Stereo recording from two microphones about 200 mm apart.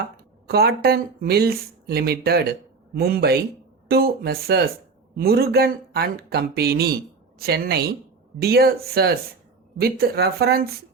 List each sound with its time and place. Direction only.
0.4 s speech: 50° right (ahead or behind)